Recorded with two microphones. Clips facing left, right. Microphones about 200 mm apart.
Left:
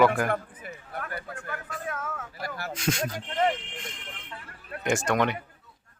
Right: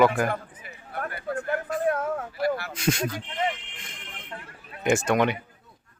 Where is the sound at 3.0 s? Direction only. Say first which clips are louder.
Left 2 dB; 45° left (ahead or behind).